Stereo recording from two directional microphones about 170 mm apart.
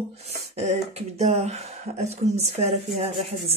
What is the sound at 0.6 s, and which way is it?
Speech, 40° right (ahead or behind).